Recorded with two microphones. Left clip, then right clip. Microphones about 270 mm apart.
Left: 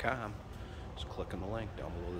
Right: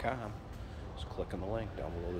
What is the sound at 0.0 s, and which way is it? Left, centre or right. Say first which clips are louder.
A man's voice: left 1 dB; centre.